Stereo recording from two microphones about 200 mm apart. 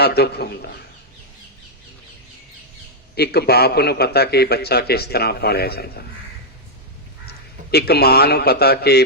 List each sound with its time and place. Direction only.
0.0 s a man's voice: 55° left (ahead or behind)
3.2 s a man's voice: 55° left (ahead or behind)
7.3 s a man's voice: 50° left (ahead or behind)